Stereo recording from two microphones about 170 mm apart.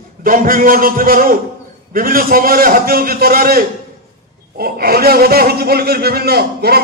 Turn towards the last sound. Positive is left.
turn(degrees=-65)  # may be behind; listen again after turning